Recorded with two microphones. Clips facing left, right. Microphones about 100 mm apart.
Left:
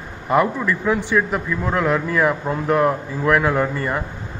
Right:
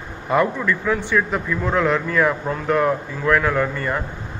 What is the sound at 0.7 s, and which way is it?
A man's voice, 15° left (ahead or behind).